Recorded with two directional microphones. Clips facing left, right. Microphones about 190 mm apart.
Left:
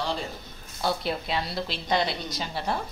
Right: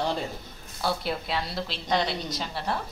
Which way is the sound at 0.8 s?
Centre (ahead or behind).